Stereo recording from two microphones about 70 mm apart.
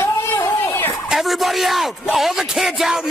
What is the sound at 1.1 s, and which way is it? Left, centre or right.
Speech, centre.